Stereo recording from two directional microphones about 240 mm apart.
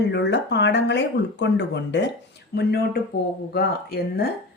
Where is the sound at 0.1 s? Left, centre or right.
Left.